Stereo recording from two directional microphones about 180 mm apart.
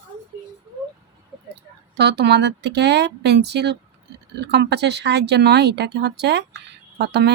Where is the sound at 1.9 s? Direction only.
70° right (ahead or behind).